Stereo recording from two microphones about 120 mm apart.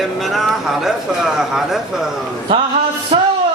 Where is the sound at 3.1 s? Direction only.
45° right (ahead or behind).